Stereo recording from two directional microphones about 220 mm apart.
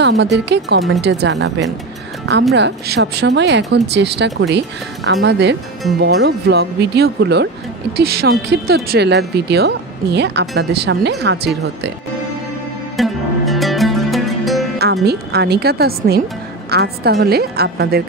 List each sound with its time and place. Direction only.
0.0 s speech: 50° right (ahead or behind)
2.5 s speech: 50° right (ahead or behind)
12.9 s music: centre (ahead or behind)
15.0 s speech: 45° right (ahead or behind)